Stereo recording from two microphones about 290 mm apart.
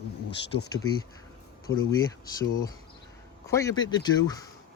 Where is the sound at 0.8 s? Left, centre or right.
Left.